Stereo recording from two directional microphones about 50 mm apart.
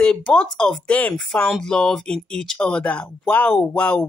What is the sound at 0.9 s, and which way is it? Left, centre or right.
Speech, left.